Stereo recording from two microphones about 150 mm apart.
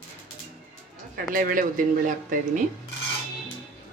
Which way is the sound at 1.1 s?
70° right (ahead or behind).